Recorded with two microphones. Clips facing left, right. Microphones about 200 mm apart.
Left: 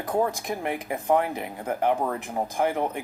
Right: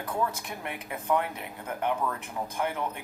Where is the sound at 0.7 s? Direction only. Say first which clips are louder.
Left 4 dB; 45° left (ahead or behind).